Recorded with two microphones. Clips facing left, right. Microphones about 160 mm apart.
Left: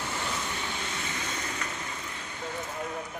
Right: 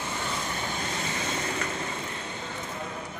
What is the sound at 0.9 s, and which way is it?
Vehicle, 40° right (ahead or behind).